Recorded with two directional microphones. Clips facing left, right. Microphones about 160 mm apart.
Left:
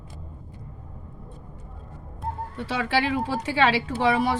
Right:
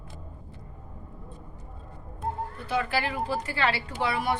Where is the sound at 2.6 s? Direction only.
90° left.